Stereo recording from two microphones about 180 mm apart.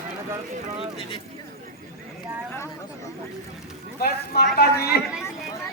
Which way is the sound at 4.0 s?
60° left (ahead or behind).